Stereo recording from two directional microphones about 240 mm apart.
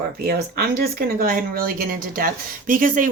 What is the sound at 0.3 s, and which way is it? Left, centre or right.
Speech, right.